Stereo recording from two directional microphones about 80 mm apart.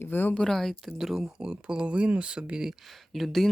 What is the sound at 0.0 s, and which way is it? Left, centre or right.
Speech, left.